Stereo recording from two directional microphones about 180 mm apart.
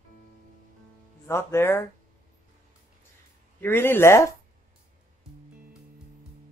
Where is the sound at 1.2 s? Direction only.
15° left (ahead or behind).